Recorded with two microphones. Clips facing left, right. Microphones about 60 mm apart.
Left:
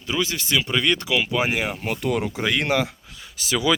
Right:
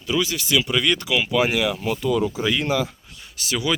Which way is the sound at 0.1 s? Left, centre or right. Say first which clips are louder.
Right 2 dB; left.